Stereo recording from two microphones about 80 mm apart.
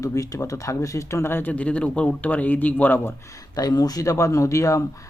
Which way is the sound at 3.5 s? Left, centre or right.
Left.